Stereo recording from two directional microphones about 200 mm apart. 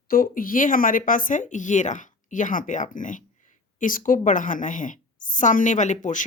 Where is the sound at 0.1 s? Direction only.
45° left (ahead or behind).